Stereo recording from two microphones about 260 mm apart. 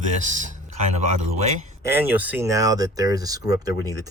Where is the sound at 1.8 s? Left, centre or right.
Centre.